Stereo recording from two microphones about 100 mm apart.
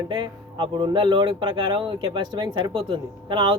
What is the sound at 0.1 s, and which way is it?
A man's voice, 50° right (ahead or behind).